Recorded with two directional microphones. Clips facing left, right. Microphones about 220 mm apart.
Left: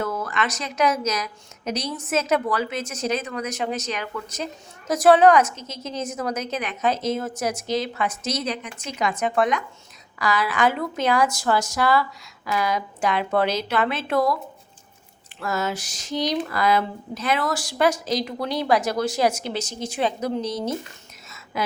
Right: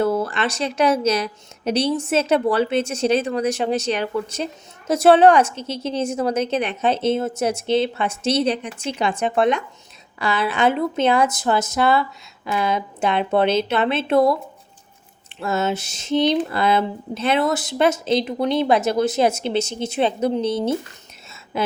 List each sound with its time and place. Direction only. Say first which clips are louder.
0.0 s speech: right 6 dB; 30° right (ahead or behind)